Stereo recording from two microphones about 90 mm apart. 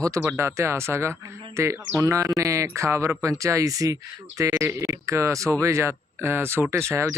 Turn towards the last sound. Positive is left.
turn(degrees=-30)  # may be behind; listen again after turning